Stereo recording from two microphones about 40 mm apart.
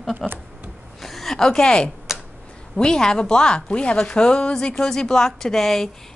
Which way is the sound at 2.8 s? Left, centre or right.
Centre.